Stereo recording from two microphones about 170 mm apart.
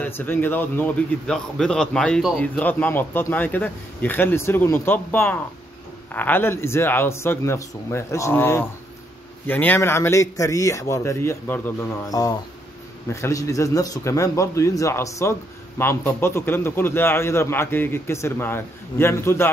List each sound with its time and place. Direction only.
0.0 s speech: 10° left (ahead or behind)